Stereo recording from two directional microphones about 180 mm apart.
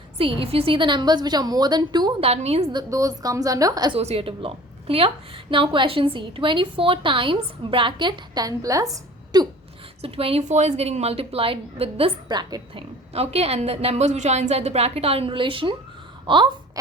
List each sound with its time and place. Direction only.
0.2 s a woman's voice: 30° right (ahead or behind)
2.3 s a woman's voice: 35° right (ahead or behind)
2.7 s a woman's voice: 20° right (ahead or behind)
3.9 s a woman's voice: 35° right (ahead or behind)
10.0 s a woman's voice: 35° right (ahead or behind)
13.1 s a woman's voice: 35° right (ahead or behind)